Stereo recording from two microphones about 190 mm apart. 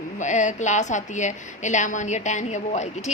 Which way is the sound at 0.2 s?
40° left (ahead or behind).